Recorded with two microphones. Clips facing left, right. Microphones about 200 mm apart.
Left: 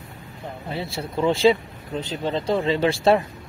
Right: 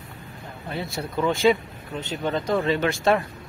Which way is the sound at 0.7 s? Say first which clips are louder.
Even; 30° left (ahead or behind).